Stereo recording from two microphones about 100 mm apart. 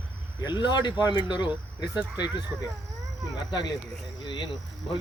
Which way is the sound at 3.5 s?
45° left (ahead or behind).